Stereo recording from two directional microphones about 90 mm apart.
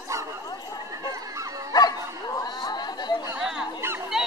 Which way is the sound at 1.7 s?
45° left (ahead or behind).